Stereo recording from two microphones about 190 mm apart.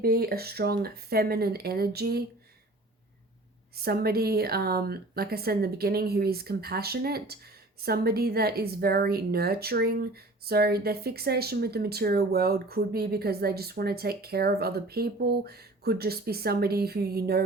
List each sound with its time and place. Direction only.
0.0 s a woman's voice: 50° right (ahead or behind)
3.8 s a woman's voice: 55° right (ahead or behind)